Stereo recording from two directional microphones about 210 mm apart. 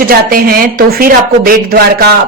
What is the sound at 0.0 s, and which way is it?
Speech, 45° right (ahead or behind).